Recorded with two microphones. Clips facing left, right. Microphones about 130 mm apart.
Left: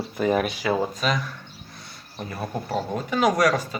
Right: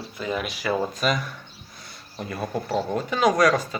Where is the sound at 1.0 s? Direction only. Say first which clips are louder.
Right 3 dB; 5° right (ahead or behind).